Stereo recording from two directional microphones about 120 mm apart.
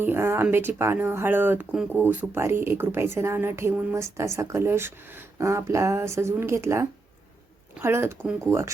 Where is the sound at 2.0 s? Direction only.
20° right (ahead or behind).